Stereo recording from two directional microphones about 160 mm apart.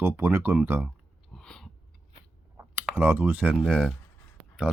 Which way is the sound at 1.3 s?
5° left (ahead or behind).